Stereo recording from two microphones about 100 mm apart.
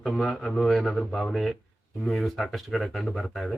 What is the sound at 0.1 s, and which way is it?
Speech, 5° left (ahead or behind).